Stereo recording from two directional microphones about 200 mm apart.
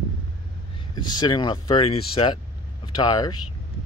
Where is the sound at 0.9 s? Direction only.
20° left (ahead or behind).